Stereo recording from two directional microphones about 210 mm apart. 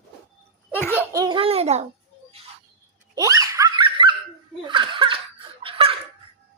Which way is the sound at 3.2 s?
15° right (ahead or behind).